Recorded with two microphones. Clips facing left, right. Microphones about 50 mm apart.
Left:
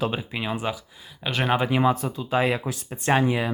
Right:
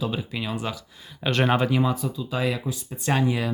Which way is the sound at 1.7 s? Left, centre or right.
Left.